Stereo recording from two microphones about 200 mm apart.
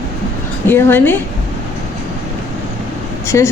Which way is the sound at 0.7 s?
10° left (ahead or behind).